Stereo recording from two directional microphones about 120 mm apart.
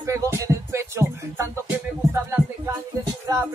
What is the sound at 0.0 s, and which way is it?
Speech, 25° right (ahead or behind).